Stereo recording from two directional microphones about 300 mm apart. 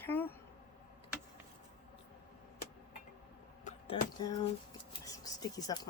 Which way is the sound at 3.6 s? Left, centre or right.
Centre.